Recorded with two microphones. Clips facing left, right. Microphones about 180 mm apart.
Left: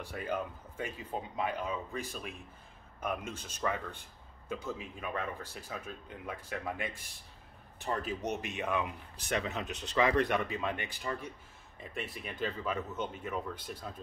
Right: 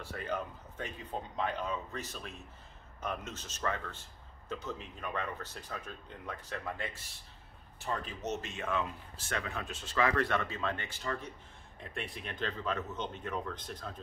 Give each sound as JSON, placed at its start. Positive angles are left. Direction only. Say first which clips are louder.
{"t": 0.0, "sound": "speech", "louder": "left 1 dB", "side_deg": 10}
{"t": 11.8, "sound": "speech", "louder": "left 1 dB", "side_deg": 0}